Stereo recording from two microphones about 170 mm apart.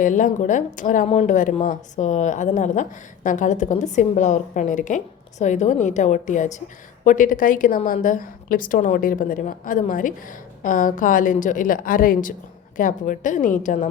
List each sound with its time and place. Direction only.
0.0 s a woman's voice: 50° left (ahead or behind)
1.0 s a woman's voice: 40° left (ahead or behind)